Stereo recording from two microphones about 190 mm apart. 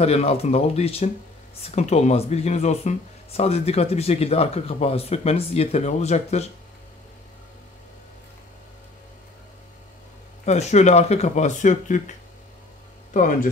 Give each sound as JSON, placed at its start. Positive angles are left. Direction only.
{"t": 0.0, "sound": "speech", "side_deg": 35}
{"t": 10.4, "sound": "speech", "side_deg": 35}